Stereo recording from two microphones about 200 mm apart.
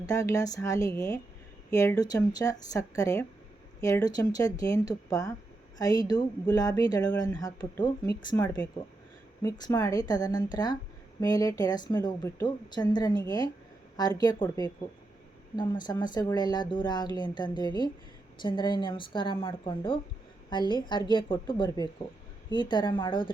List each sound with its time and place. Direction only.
0.0 s a woman's voice: 15° left (ahead or behind)